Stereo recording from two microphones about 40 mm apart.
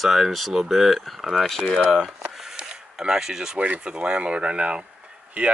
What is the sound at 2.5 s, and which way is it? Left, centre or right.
Zipper, centre.